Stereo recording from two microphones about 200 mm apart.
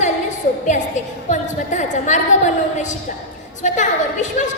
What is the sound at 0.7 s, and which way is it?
A woman's voice, 35° left (ahead or behind).